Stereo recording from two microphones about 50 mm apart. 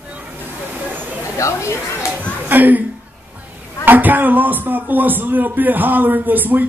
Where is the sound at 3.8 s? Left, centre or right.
Right.